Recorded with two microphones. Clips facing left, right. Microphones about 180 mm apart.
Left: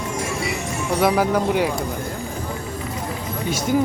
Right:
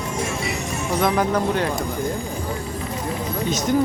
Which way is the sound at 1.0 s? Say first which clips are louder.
Left 2 dB; 5° left (ahead or behind).